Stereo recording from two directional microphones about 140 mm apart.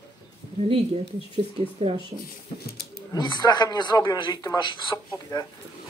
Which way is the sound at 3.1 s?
30° left (ahead or behind).